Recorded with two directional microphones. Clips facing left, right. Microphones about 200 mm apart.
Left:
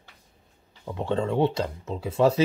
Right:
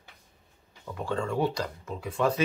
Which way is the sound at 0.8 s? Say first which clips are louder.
Left 5 dB; 25° left (ahead or behind).